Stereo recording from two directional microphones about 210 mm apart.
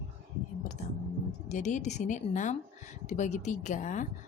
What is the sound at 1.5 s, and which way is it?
A woman's voice, 35° left (ahead or behind).